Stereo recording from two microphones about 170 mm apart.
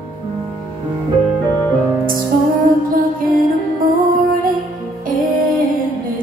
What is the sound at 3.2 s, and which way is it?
Music, 55° right (ahead or behind).